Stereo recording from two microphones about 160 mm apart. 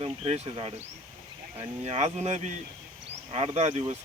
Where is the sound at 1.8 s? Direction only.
45° right (ahead or behind).